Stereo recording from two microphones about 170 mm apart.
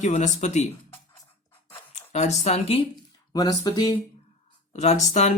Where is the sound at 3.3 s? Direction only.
20° left (ahead or behind).